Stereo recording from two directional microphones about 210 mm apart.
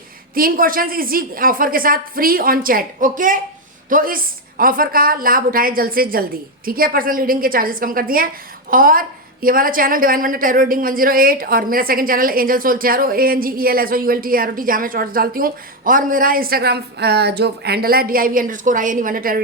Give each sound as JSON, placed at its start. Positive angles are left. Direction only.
{"t": 0.3, "sound": "a woman's voice", "side_deg": -40}